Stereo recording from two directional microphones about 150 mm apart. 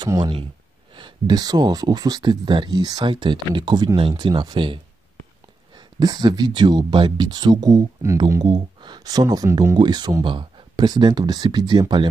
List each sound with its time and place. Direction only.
0.0 s speech: 30° right (ahead or behind)
5.8 s speech: 25° right (ahead or behind)